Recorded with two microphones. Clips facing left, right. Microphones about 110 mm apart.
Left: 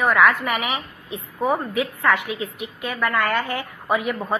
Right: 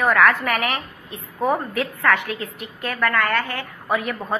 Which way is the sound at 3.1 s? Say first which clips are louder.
Left 1 dB; 20° left (ahead or behind).